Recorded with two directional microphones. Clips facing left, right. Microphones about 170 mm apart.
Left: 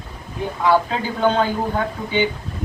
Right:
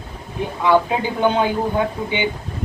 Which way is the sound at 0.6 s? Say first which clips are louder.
Right 2 dB; 20° right (ahead or behind).